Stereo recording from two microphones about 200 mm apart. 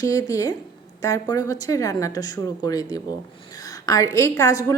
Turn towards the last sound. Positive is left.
turn(degrees=15)  # may be behind; listen again after turning